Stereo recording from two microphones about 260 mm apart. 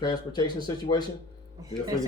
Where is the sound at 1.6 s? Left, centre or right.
Centre.